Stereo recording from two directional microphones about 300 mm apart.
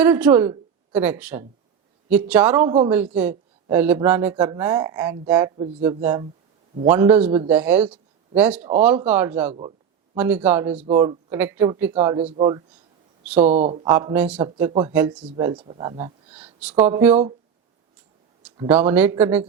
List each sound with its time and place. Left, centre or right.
0.0 s a man's voice: centre
7.3 s speech: centre
7.5 s speech: centre
10.8 s a man's voice: centre
13.2 s speech: centre
13.5 s speech: right
13.9 s a man's voice: centre
18.4 s a man's voice: centre